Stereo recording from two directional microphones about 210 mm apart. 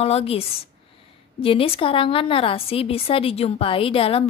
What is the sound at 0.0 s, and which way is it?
A woman's voice, 30° left (ahead or behind).